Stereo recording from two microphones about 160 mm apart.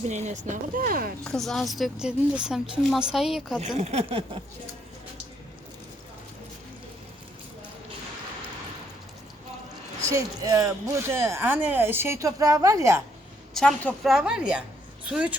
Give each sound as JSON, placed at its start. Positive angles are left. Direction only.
{"t": 0.1, "sound": "speech", "side_deg": -45}
{"t": 1.2, "sound": "a woman's voice", "side_deg": 5}
{"t": 3.8, "sound": "speech", "side_deg": -40}
{"t": 10.1, "sound": "speech", "side_deg": -20}
{"t": 13.5, "sound": "a woman's voice", "side_deg": 5}